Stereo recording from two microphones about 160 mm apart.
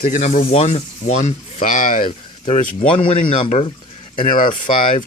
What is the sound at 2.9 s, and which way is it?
Speech, 30° left (ahead or behind).